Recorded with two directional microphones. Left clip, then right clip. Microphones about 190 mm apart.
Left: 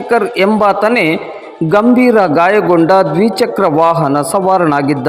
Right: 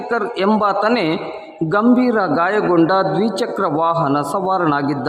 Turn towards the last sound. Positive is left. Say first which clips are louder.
# left 6 dB
turn(degrees=25)  # may be behind; listen again after turning